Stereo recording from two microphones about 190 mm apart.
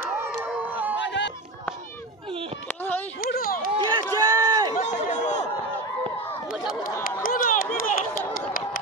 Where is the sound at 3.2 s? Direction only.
50° left (ahead or behind).